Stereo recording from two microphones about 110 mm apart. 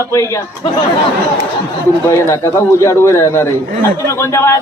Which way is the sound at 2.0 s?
25° left (ahead or behind).